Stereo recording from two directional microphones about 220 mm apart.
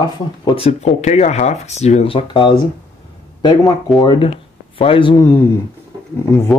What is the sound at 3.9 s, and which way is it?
Speech, 20° left (ahead or behind).